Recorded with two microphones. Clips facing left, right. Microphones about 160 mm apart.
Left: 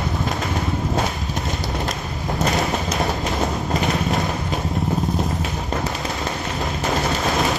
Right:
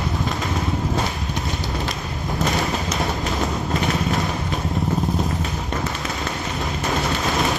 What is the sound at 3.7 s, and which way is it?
Clip-clop, centre (ahead or behind).